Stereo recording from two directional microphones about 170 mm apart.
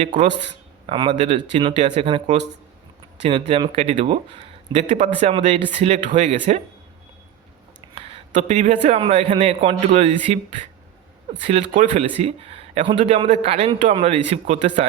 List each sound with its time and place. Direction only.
0.0 s a man's voice: 45° right (ahead or behind)
0.9 s a man's voice: 30° right (ahead or behind)
5.3 s a man's voice: 30° right (ahead or behind)
7.9 s a man's voice: 40° right (ahead or behind)
11.4 s a man's voice: 45° right (ahead or behind)